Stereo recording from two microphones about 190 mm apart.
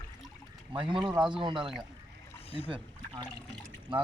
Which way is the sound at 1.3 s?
25° right (ahead or behind).